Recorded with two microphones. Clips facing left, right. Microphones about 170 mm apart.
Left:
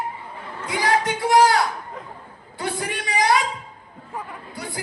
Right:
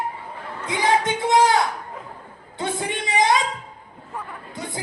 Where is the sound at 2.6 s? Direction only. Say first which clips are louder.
Right 1 dB; 20° right (ahead or behind).